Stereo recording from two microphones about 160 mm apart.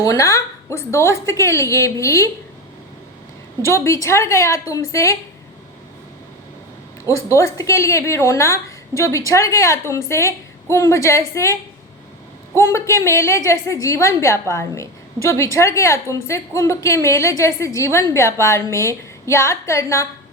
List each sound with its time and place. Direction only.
0.0 s a woman's voice: 20° left (ahead or behind)
3.6 s a woman's voice: 15° left (ahead or behind)
7.0 s a woman's voice: 20° left (ahead or behind)
12.5 s a woman's voice: 20° left (ahead or behind)